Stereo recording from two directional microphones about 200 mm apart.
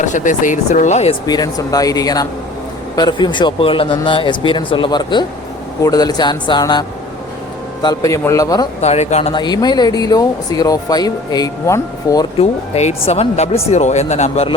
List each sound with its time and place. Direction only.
0.0 s speech: 40° left (ahead or behind)
1.3 s a man's voice: 20° left (ahead or behind)
8.8 s speech: 35° left (ahead or behind)
12.7 s speech: 30° left (ahead or behind)